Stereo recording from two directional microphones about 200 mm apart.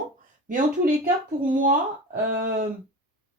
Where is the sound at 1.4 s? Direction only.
40° right (ahead or behind).